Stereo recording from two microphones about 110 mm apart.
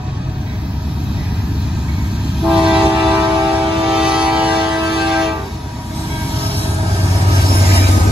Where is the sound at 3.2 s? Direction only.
45° right (ahead or behind).